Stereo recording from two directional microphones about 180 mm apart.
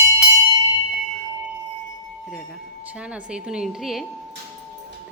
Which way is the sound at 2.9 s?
5° right (ahead or behind).